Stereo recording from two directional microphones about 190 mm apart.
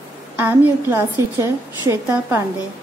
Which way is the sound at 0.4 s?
10° right (ahead or behind).